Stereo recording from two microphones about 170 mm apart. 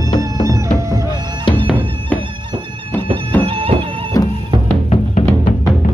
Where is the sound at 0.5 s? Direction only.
20° right (ahead or behind).